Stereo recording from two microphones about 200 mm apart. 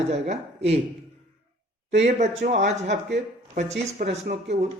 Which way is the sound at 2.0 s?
35° right (ahead or behind).